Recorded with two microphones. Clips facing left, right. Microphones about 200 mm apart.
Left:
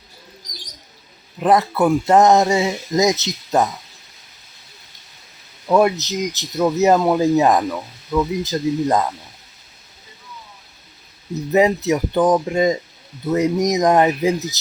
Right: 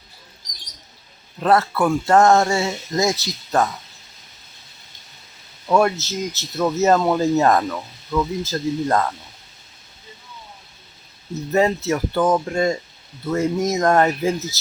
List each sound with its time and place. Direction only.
1.4 s speech: 15° left (ahead or behind)
5.7 s speech: 20° left (ahead or behind)
11.5 s speech: 15° left (ahead or behind)